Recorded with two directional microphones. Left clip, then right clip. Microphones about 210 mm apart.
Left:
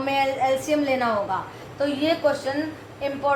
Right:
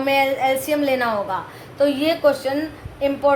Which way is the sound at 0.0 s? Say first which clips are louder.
Right 4 dB; 55° right (ahead or behind).